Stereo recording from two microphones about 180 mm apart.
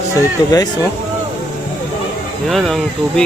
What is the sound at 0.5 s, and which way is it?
Speech, 20° left (ahead or behind).